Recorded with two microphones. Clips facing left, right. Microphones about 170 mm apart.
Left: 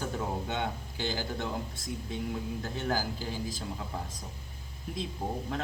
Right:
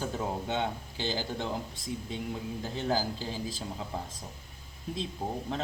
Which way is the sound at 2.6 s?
15° right (ahead or behind).